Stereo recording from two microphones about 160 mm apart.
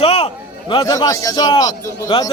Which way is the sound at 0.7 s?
25° left (ahead or behind).